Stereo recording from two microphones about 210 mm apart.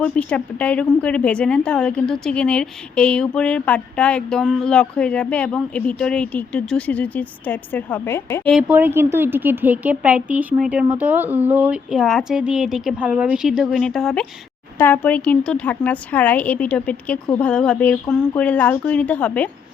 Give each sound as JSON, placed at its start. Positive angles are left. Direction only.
{"t": 0.0, "sound": "speech", "side_deg": 5}
{"t": 8.5, "sound": "a woman's voice", "side_deg": -5}